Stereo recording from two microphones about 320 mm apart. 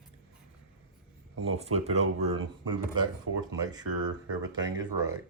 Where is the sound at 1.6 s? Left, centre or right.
Centre.